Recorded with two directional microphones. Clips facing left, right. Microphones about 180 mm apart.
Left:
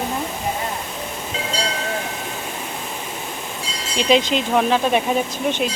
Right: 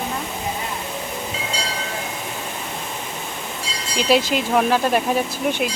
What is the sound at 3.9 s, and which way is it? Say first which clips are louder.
Speech: left 1 dB; 5° right (ahead or behind).